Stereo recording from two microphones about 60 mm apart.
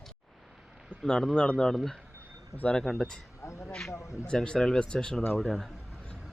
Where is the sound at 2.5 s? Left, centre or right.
Left.